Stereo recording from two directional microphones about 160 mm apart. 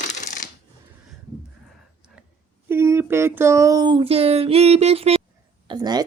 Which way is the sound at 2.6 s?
15° right (ahead or behind).